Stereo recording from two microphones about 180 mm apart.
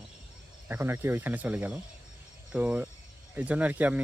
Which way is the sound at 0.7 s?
10° right (ahead or behind).